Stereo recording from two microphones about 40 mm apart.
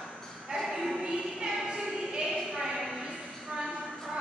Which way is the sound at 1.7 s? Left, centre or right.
Right.